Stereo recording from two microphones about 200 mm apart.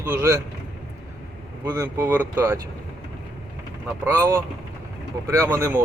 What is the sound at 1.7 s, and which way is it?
Speech, 15° right (ahead or behind).